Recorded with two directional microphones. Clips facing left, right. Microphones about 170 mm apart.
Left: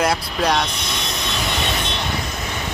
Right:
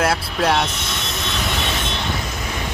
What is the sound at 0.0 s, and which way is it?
Speech, 5° right (ahead or behind).